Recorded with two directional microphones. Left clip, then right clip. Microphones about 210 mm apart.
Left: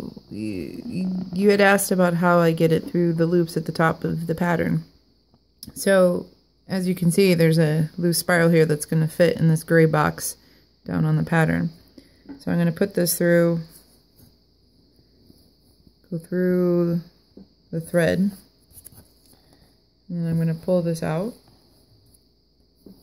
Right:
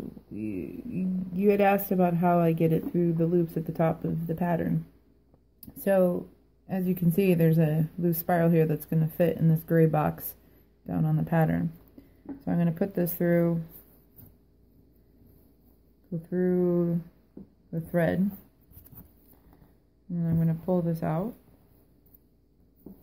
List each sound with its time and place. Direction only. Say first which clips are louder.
0.4 s speech: left 5 dB; 40° left (ahead or behind)
16.3 s speech: left 5 dB; 50° left (ahead or behind)
20.1 s speech: left 4 dB; 45° left (ahead or behind)